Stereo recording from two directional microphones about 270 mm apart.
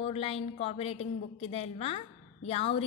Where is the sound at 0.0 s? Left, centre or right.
Left.